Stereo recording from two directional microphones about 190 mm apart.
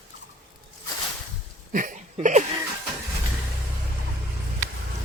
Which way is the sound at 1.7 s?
45° right (ahead or behind).